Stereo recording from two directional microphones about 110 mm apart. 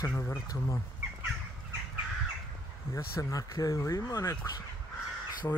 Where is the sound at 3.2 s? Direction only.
30° left (ahead or behind).